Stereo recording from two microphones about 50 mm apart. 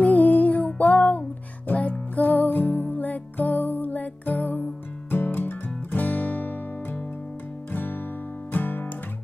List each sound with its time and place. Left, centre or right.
0.0 s music: left
8.5 s guitar: left